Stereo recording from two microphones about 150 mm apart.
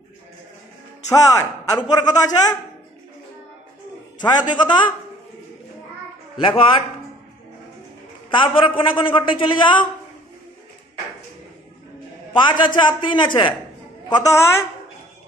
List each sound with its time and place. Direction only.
1.0 s a man's voice: 20° left (ahead or behind)
4.2 s a man's voice: 30° left (ahead or behind)
6.4 s a man's voice: 35° left (ahead or behind)
8.3 s a man's voice: 35° left (ahead or behind)
12.4 s a man's voice: 30° left (ahead or behind)